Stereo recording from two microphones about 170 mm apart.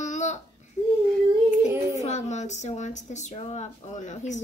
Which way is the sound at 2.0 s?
45° left (ahead or behind).